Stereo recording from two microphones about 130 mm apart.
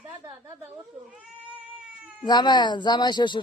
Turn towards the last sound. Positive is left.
turn(degrees=35)  # may be behind; listen again after turning